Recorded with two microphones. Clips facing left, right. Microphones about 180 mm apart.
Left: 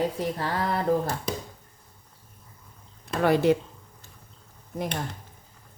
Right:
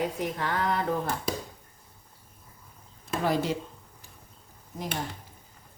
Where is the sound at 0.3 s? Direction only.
35° left (ahead or behind).